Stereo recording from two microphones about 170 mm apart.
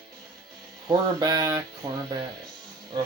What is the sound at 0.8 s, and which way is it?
Speech, 25° right (ahead or behind).